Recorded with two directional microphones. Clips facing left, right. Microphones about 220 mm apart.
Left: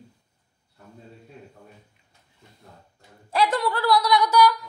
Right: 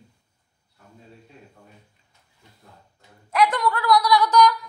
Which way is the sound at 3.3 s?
30° left (ahead or behind).